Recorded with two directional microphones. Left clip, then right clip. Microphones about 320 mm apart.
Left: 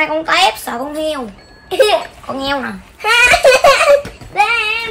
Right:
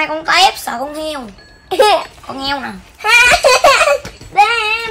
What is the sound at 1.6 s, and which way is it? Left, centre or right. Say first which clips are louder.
Speech: right 1 dB; centre.